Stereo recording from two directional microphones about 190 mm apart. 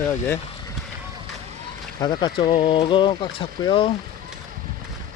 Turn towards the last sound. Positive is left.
turn(degrees=25)  # may be behind; listen again after turning